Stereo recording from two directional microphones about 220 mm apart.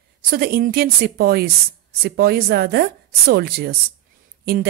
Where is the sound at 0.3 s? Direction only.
45° right (ahead or behind).